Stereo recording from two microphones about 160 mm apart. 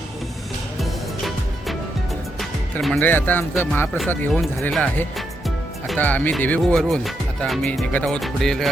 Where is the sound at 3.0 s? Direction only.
10° left (ahead or behind).